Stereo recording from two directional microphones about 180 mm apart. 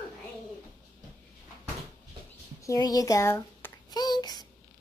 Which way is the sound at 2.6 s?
20° left (ahead or behind).